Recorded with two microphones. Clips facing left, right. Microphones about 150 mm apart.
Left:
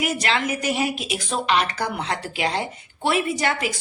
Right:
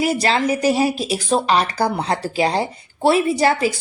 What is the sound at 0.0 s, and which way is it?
A woman's voice, 35° right (ahead or behind).